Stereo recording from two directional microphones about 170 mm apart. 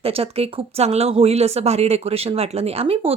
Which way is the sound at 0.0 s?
35° right (ahead or behind).